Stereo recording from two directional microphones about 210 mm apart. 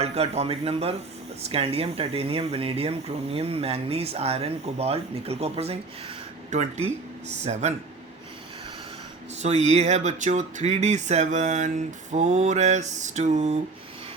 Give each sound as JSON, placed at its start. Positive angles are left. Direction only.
{"t": 0.0, "sound": "speech", "side_deg": -30}
{"t": 9.4, "sound": "speech", "side_deg": -35}